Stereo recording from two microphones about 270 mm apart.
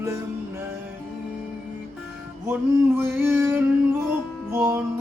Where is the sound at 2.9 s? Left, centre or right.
Centre.